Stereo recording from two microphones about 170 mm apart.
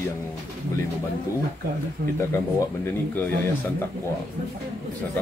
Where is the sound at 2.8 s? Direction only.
15° left (ahead or behind).